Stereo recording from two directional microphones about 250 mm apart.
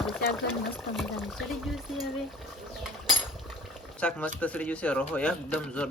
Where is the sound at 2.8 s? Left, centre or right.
Centre.